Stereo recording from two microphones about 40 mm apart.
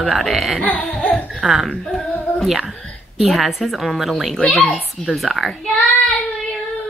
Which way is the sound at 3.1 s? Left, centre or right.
Centre.